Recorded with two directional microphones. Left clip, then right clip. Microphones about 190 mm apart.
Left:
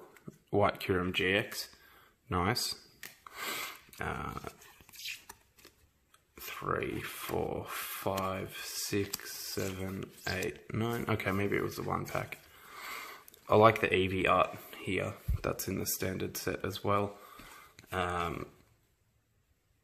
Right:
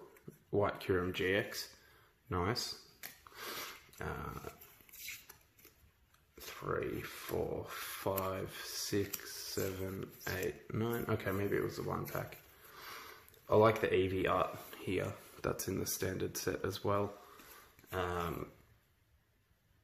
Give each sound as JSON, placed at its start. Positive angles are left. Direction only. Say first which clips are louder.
{"t": 0.5, "sound": "speech", "louder": "left 4 dB", "side_deg": 40}
{"t": 3.3, "sound": "dog", "louder": "left 6 dB", "side_deg": 40}
{"t": 6.3, "sound": "speech", "louder": "left 4 dB", "side_deg": 40}